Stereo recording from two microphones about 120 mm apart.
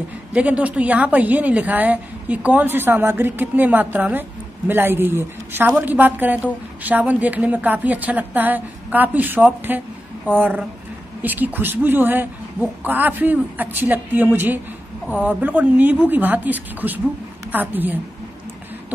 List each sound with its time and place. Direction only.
0.3 s a woman's voice: 10° right (ahead or behind)